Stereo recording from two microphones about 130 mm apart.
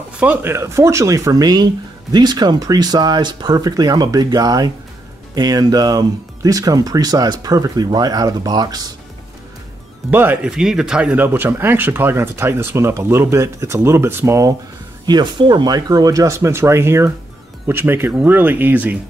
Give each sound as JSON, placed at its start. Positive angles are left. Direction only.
{"t": 0.2, "sound": "speech", "side_deg": -15}
{"t": 10.1, "sound": "speech", "side_deg": -15}
{"t": 15.0, "sound": "speech", "side_deg": -35}